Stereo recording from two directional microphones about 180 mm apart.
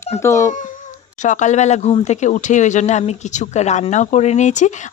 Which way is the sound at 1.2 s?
40° left (ahead or behind).